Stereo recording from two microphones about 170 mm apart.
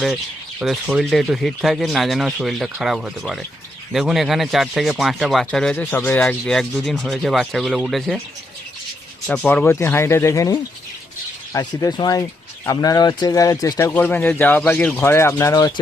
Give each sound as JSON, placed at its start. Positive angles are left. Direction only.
{"t": 0.6, "sound": "speech", "side_deg": 0}
{"t": 9.2, "sound": "speech", "side_deg": 5}